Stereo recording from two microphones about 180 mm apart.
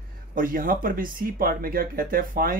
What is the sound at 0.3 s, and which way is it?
Speech, 50° right (ahead or behind).